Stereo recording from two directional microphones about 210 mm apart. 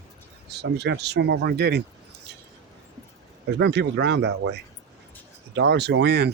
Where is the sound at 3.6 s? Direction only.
55° right (ahead or behind).